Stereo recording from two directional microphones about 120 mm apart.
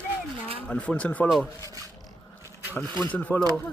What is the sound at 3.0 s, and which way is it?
Speech, 15° left (ahead or behind).